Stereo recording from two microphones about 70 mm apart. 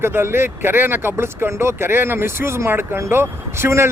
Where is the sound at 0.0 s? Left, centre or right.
Right.